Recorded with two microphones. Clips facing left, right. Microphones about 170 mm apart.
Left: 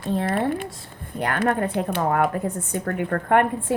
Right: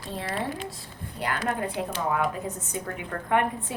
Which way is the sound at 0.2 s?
55° left (ahead or behind).